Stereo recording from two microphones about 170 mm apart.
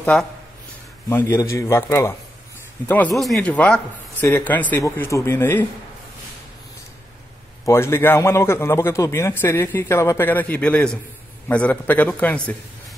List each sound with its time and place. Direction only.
0.0 s a man's voice: 5° left (ahead or behind)
3.2 s a man's voice: centre (ahead or behind)
7.6 s a man's voice: 15° left (ahead or behind)